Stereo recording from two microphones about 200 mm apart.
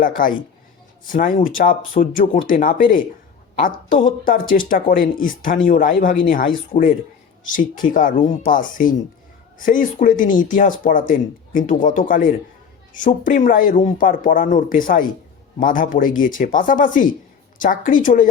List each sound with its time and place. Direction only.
0.0 s a woman's voice: 40° left (ahead or behind)